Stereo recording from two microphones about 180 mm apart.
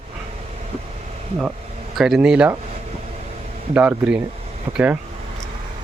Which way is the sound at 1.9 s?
5° right (ahead or behind).